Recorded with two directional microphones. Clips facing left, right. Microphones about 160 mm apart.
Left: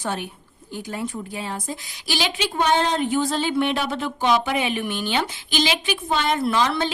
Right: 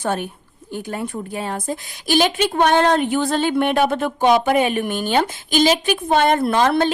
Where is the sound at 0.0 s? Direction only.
50° right (ahead or behind).